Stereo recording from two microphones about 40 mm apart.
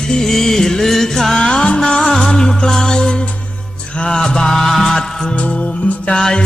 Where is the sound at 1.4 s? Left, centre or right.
Left.